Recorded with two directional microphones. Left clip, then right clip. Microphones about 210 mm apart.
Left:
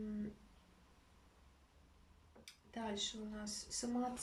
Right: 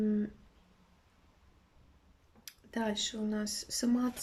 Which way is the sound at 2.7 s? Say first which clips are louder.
Right 8 dB; 50° right (ahead or behind).